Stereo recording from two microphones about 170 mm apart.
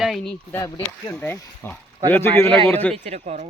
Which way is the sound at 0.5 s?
15° left (ahead or behind).